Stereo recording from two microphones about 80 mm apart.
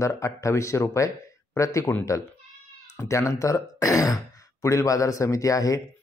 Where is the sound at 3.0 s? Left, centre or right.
Left.